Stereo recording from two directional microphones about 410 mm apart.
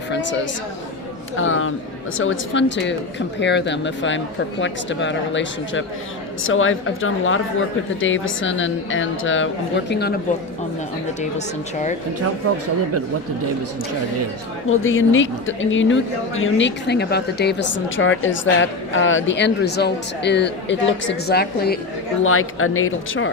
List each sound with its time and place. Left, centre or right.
1.4 s speech: left
11.2 s speech: centre
14.7 s speech: left